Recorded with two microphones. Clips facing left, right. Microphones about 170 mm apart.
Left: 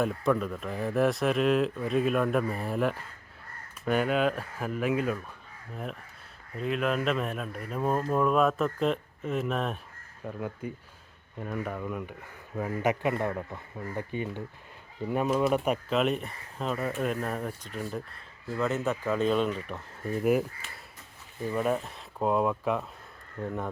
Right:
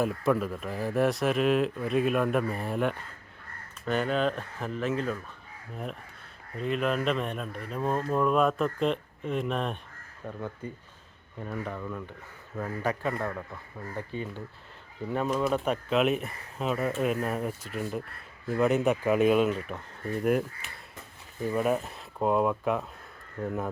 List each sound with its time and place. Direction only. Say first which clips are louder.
0.0 s speech: even; 5° right (ahead or behind)
5.7 s speech: even; centre (ahead or behind)
15.9 s speech: right 4 dB; centre (ahead or behind)
18.4 s speech: right 5 dB; 15° right (ahead or behind)
21.4 s speech: right 1 dB; 5° right (ahead or behind)